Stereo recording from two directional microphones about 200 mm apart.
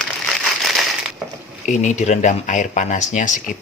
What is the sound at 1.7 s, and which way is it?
Speech, 35° left (ahead or behind).